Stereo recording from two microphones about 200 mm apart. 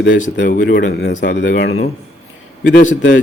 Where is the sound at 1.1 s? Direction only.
40° left (ahead or behind).